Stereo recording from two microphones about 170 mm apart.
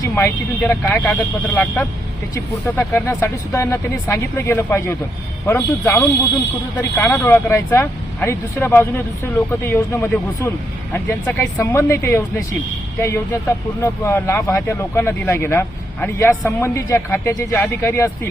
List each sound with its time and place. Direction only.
0.0 s speech: 15° left (ahead or behind)